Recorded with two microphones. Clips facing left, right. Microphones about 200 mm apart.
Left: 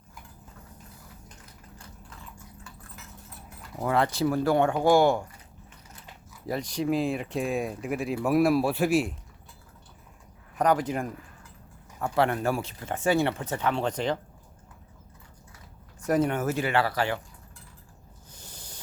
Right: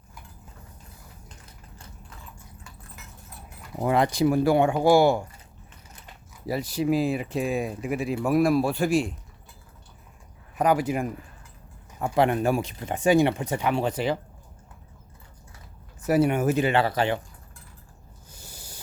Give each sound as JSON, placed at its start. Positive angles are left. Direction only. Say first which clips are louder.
{"t": 3.8, "sound": "speech", "louder": "right 3 dB", "side_deg": -15}
{"t": 6.4, "sound": "speech", "louder": "right 3 dB", "side_deg": -5}
{"t": 10.6, "sound": "speech", "louder": "right 2 dB", "side_deg": -10}
{"t": 16.0, "sound": "speech", "louder": "right 3 dB", "side_deg": -5}
{"t": 18.3, "sound": "a sound", "louder": "right 1 dB", "side_deg": -10}